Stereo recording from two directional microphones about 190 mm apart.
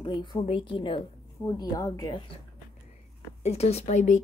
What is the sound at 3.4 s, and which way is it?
Speech, 35° left (ahead or behind).